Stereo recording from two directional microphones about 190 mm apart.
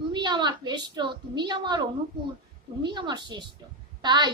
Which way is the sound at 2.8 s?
25° right (ahead or behind).